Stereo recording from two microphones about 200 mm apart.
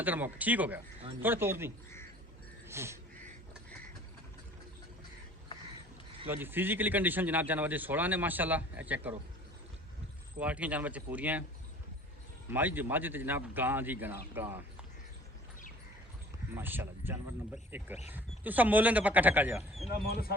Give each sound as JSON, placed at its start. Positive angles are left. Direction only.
{"t": 0.0, "sound": "speech", "side_deg": -10}
{"t": 2.6, "sound": "a sound", "side_deg": -15}
{"t": 6.2, "sound": "speech", "side_deg": -10}
{"t": 10.4, "sound": "speech", "side_deg": -5}
{"t": 12.5, "sound": "speech", "side_deg": -10}
{"t": 16.6, "sound": "speech", "side_deg": -10}
{"t": 20.1, "sound": "speech", "side_deg": 50}